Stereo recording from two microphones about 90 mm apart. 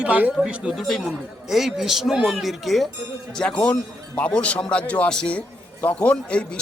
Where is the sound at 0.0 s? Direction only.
15° right (ahead or behind).